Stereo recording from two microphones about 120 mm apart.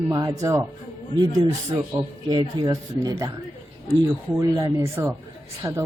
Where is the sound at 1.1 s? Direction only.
40° right (ahead or behind).